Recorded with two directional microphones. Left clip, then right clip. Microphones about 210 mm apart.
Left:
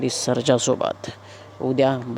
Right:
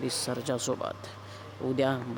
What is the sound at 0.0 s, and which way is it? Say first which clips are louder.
Speech: left 10 dB; 30° left (ahead or behind).